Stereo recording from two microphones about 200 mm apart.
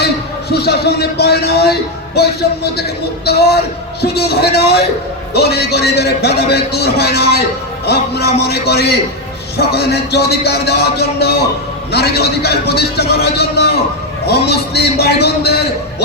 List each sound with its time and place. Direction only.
0.5 s speech: 55° left (ahead or behind)